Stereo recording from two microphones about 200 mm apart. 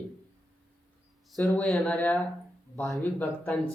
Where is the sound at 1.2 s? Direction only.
Centre (ahead or behind).